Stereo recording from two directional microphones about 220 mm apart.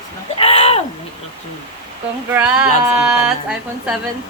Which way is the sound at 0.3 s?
25° left (ahead or behind).